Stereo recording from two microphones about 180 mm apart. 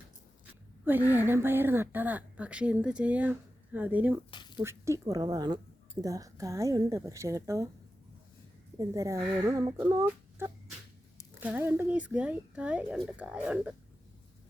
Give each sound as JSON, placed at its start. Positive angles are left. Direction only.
{"t": 0.9, "sound": "a woman's voice", "side_deg": -10}
{"t": 4.3, "sound": "a sound", "side_deg": 25}
{"t": 4.5, "sound": "a woman's voice", "side_deg": -15}
{"t": 8.8, "sound": "a woman's voice", "side_deg": -15}